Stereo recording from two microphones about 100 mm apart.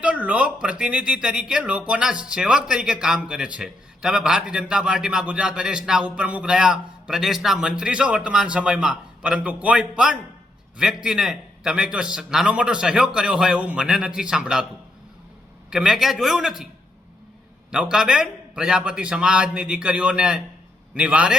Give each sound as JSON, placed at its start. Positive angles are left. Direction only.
{"t": 0.0, "sound": "speech", "side_deg": -15}
{"t": 15.7, "sound": "a man's voice", "side_deg": -5}
{"t": 17.7, "sound": "speech", "side_deg": -10}